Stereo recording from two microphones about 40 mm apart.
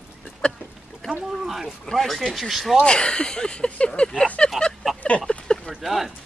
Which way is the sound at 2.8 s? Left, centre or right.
Left.